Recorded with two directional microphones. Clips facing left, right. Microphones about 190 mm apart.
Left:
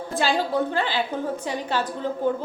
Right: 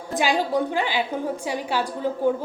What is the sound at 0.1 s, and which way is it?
A woman's voice, 15° right (ahead or behind).